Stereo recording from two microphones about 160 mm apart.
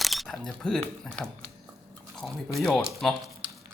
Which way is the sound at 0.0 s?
Centre (ahead or behind).